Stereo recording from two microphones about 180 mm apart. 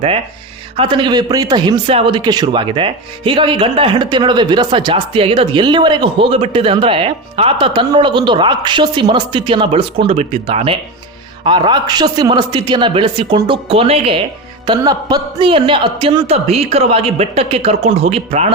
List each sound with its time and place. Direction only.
0.8 s a man's voice: 25° right (ahead or behind)